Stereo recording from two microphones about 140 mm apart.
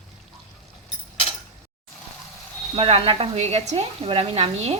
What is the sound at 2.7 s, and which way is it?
Speech, 40° right (ahead or behind).